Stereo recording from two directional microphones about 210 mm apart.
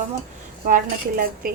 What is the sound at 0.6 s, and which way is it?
Speech, 40° right (ahead or behind).